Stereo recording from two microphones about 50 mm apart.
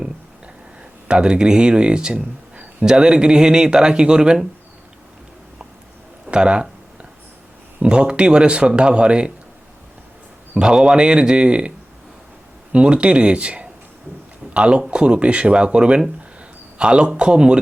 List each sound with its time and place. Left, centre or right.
1.0 s a man's voice: centre
6.2 s speech: centre
7.8 s speech: right
10.5 s speech: centre
12.7 s a man's voice: right